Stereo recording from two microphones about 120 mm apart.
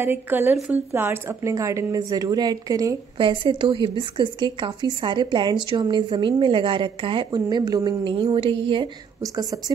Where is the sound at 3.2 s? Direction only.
45° right (ahead or behind).